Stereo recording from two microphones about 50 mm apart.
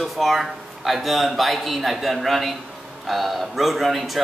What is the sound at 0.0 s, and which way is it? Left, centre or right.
A man's voice, centre.